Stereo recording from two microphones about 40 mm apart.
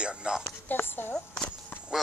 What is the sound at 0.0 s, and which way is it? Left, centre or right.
Music, right.